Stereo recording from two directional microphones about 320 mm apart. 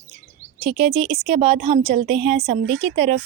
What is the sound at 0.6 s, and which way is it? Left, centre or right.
Speech, centre.